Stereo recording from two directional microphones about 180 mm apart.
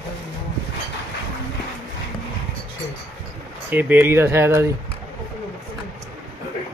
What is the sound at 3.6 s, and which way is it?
Speech, 10° right (ahead or behind).